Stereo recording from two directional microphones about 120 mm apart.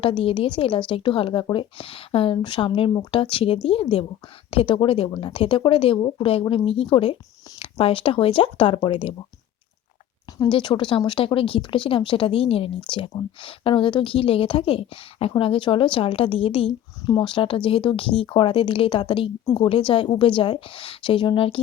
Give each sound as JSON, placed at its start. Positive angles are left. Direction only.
{"t": 0.0, "sound": "a woman's voice", "side_deg": 50}
{"t": 10.3, "sound": "a woman's voice", "side_deg": 40}